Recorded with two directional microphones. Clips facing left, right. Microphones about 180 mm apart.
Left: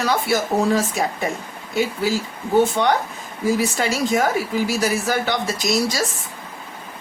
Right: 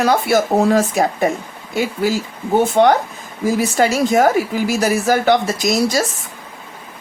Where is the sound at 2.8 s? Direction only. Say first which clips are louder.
Right 7 dB; 55° right (ahead or behind).